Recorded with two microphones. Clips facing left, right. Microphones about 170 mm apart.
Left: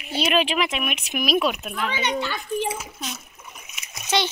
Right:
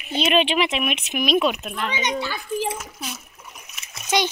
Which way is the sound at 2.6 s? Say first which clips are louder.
Even; centre (ahead or behind).